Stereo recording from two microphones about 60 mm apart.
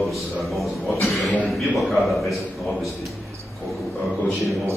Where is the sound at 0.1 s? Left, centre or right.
Centre.